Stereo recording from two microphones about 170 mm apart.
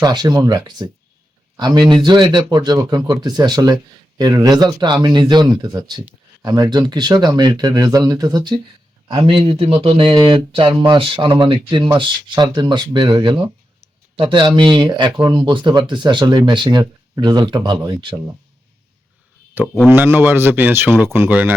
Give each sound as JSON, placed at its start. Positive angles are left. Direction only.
{"t": 0.0, "sound": "speech", "side_deg": -25}
{"t": 19.6, "sound": "speech", "side_deg": -10}